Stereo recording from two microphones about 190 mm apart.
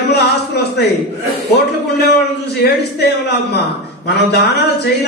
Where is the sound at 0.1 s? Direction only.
55° left (ahead or behind).